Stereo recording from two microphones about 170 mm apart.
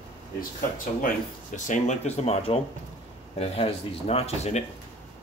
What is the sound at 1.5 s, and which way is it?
Speech, 45° left (ahead or behind).